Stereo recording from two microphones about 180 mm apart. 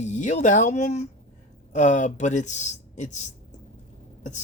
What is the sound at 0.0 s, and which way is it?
Speech, 40° left (ahead or behind).